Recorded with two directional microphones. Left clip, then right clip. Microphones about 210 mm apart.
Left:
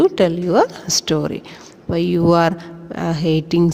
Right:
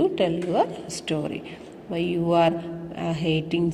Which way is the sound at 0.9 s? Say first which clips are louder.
Left 10 dB; 35° left (ahead or behind).